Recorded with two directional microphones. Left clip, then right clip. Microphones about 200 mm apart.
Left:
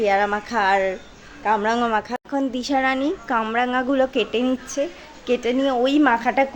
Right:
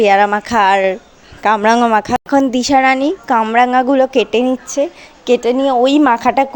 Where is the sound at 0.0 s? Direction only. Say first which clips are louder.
Right 9 dB; 40° right (ahead or behind).